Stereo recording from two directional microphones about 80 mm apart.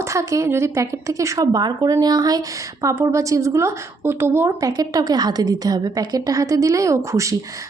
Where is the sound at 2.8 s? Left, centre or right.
Right.